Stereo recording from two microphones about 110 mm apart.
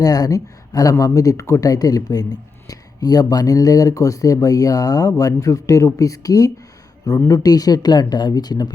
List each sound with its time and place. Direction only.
0.0 s speech: 35° left (ahead or behind)